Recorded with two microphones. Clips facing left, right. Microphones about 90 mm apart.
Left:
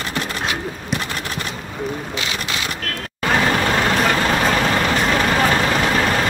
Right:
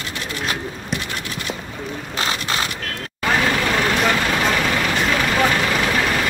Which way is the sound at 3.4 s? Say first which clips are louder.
Left 3 dB; 35° left (ahead or behind).